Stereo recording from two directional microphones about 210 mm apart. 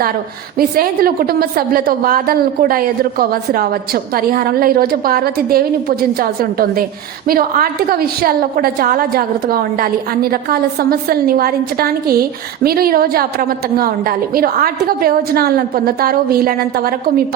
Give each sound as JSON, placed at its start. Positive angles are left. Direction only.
{"t": 0.6, "sound": "a woman's voice", "side_deg": -45}